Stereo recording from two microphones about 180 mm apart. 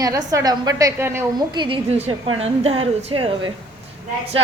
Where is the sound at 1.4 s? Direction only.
25° right (ahead or behind).